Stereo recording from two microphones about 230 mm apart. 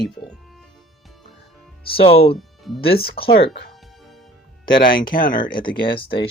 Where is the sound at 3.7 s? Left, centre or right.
Centre.